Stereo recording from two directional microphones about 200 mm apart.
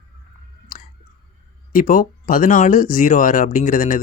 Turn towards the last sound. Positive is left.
turn(degrees=40)  # may be behind; listen again after turning